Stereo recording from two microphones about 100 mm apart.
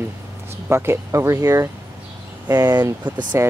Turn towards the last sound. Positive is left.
turn(degrees=-30)  # may be behind; listen again after turning